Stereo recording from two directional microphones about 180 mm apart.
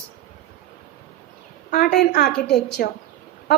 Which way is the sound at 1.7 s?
60° left (ahead or behind).